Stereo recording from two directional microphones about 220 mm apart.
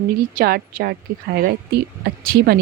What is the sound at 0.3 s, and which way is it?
Speech, 45° right (ahead or behind).